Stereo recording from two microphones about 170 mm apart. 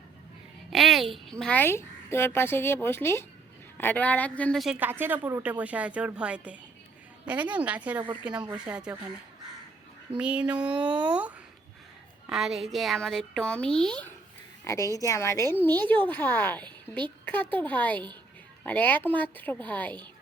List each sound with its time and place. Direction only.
0.7 s a woman's voice: centre (ahead or behind)
4.8 s a woman's voice: 10° right (ahead or behind)
10.2 s a woman's voice: 5° right (ahead or behind)
14.6 s speech: 20° left (ahead or behind)